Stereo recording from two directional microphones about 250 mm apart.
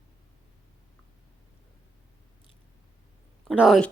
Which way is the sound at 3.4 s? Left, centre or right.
Centre.